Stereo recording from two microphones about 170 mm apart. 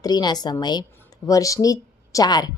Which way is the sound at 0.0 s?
25° left (ahead or behind).